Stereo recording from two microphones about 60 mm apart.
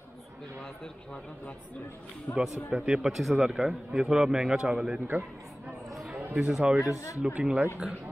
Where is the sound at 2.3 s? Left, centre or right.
Left.